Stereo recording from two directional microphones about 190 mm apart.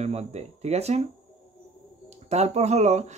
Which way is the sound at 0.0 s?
35° right (ahead or behind).